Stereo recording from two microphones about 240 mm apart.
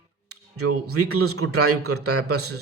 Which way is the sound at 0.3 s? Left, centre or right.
Right.